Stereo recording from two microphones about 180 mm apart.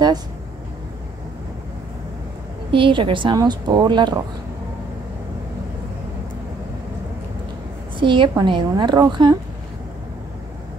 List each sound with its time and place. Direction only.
2.7 s a woman's voice: 30° right (ahead or behind)
8.0 s a woman's voice: 25° right (ahead or behind)